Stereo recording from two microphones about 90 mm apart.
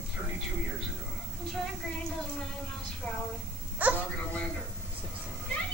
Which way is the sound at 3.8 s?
15° right (ahead or behind).